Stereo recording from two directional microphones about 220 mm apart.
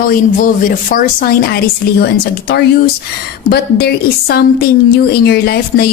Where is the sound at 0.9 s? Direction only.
40° left (ahead or behind).